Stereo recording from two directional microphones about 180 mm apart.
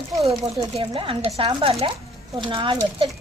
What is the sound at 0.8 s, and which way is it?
A woman's voice, 30° right (ahead or behind).